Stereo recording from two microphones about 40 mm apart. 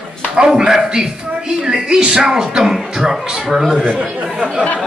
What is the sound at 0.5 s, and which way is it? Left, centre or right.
Speech, centre.